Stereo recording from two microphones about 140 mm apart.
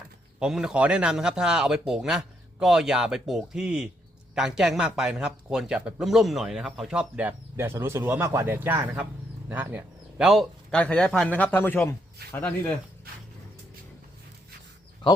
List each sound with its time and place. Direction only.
0.3 s a man's voice: 5° right (ahead or behind); by 12.5 s 15° left (ahead or behind)
15.0 s speech: 35° left (ahead or behind)